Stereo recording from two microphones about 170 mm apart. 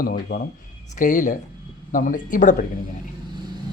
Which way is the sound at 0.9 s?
50° left (ahead or behind).